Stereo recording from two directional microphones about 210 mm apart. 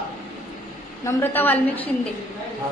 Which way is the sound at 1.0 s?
10° left (ahead or behind).